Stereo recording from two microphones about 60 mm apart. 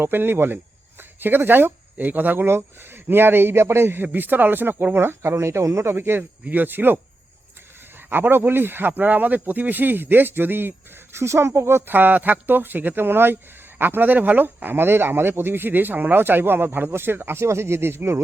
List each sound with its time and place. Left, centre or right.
0.0 s speech: right
6.0 s speech: right
8.1 s speech: right
11.9 s speech: right